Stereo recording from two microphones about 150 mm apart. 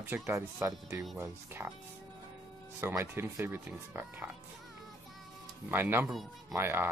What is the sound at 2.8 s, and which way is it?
Speech, 15° right (ahead or behind).